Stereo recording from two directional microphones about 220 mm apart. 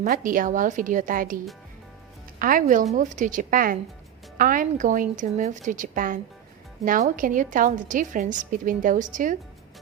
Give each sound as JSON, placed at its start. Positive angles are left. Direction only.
{"t": 0.0, "sound": "a woman's voice", "side_deg": -40}
{"t": 2.4, "sound": "a woman's voice", "side_deg": -40}